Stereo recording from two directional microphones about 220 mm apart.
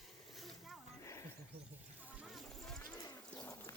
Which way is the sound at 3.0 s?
15° left (ahead or behind).